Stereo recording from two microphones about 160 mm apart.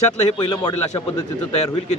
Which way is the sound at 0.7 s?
25° left (ahead or behind).